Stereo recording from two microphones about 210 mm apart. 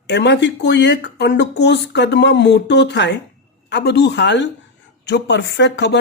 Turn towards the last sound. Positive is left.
turn(degrees=55)  # may be behind; listen again after turning